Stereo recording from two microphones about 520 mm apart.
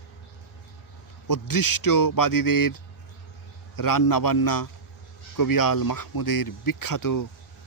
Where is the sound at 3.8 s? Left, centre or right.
Left.